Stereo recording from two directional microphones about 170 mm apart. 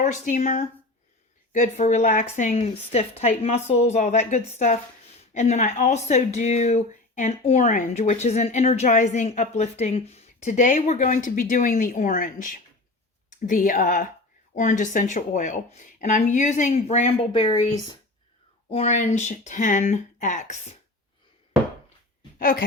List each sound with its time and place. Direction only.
0.0 s speech: 45° left (ahead or behind); by 17.9 s 30° left (ahead or behind)
18.7 s speech: 40° left (ahead or behind)
22.4 s speech: 55° left (ahead or behind)